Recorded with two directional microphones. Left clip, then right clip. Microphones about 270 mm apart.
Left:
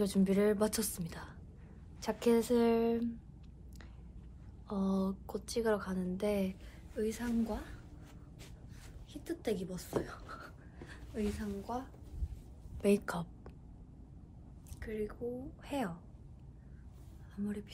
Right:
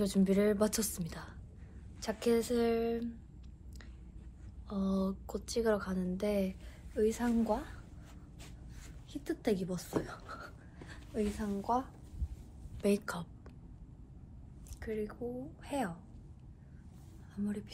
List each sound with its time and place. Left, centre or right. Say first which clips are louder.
0.0 s a woman's voice: even; centre
4.6 s a woman's voice: even; centre
7.0 s a woman's voice: right 5 dB; centre
9.1 s a woman's voice: right 3 dB; right
9.8 s a sound: right 1 dB; centre
11.6 s a woman's voice: right 10 dB; centre
12.8 s a woman's voice: left 1 dB; centre
14.8 s a woman's voice: right 1 dB; centre
17.4 s a woman's voice: right 1 dB; centre